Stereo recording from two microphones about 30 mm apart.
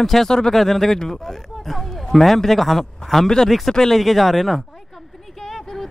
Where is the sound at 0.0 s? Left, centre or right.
Centre.